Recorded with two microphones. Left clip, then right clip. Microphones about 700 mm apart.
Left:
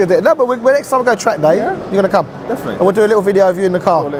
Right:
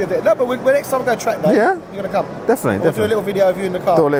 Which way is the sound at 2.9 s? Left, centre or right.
Left.